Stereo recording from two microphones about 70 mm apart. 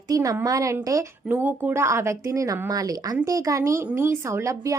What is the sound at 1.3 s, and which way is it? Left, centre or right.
Speech, right.